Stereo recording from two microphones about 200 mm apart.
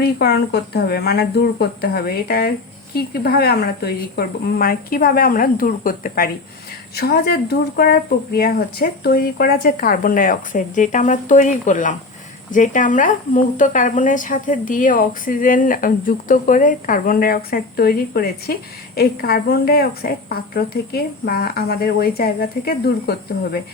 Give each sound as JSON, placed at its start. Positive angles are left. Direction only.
{"t": 0.0, "sound": "speech", "side_deg": 55}